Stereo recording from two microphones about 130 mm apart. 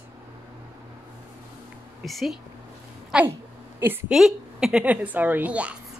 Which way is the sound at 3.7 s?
15° right (ahead or behind).